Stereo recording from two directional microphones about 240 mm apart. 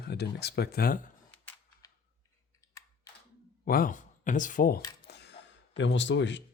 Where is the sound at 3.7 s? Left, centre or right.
Left.